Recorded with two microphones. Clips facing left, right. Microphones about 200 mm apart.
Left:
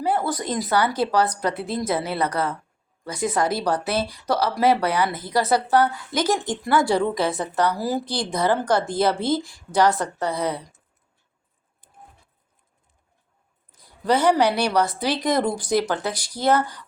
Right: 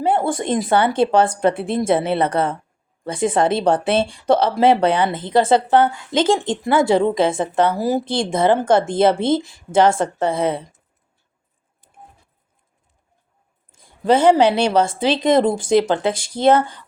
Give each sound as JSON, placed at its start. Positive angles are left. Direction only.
{"t": 0.0, "sound": "speech", "side_deg": -25}
{"t": 13.7, "sound": "speech", "side_deg": -25}